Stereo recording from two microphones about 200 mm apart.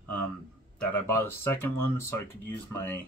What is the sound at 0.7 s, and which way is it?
Speech, 10° left (ahead or behind).